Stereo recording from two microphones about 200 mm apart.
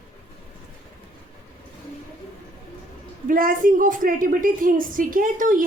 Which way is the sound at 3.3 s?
45° right (ahead or behind).